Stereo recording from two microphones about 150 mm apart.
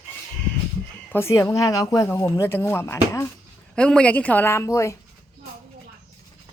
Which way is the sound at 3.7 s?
5° left (ahead or behind).